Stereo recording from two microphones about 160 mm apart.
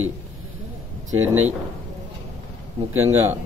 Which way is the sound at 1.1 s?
15° right (ahead or behind).